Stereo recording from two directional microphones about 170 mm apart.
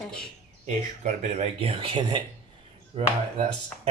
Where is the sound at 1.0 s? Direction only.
40° right (ahead or behind).